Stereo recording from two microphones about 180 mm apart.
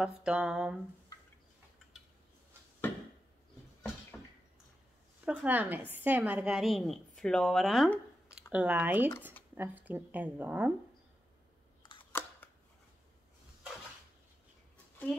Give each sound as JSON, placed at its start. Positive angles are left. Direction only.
{"t": 0.0, "sound": "a sound", "side_deg": -5}
{"t": 5.2, "sound": "a woman's voice", "side_deg": -10}
{"t": 12.0, "sound": "camera", "side_deg": 10}